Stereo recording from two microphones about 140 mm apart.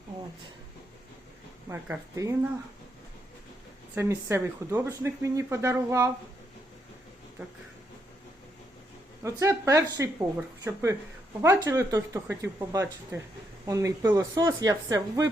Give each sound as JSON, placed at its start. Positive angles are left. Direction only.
{"t": 1.7, "sound": "speech", "side_deg": -20}
{"t": 3.9, "sound": "speech", "side_deg": -20}
{"t": 9.2, "sound": "speech", "side_deg": -20}